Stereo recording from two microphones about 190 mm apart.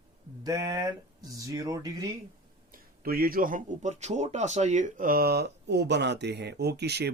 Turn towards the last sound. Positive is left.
turn(degrees=-60)  # may be behind; listen again after turning